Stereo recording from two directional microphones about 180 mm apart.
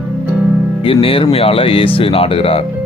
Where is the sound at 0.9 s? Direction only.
30° left (ahead or behind).